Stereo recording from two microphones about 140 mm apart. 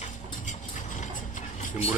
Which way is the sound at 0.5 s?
65° left (ahead or behind).